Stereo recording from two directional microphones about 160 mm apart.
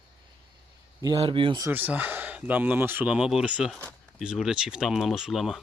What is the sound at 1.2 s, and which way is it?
Speech, 35° right (ahead or behind).